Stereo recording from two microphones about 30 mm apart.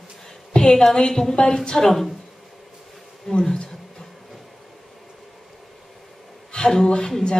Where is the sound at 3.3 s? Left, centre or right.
Centre.